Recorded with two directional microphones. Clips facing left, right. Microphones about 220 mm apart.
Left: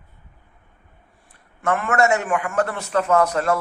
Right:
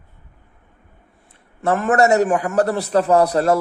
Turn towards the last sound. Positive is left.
turn(degrees=-35)  # may be behind; listen again after turning